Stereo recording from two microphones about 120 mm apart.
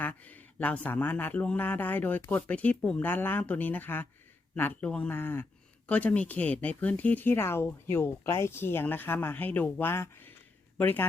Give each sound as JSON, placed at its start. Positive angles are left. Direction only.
{"t": 0.0, "sound": "speech", "side_deg": 15}